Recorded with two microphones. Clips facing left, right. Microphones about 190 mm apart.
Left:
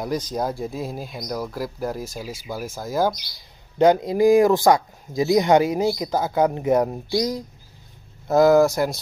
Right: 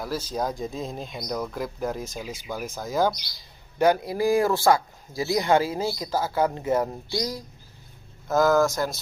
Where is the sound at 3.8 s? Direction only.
20° left (ahead or behind).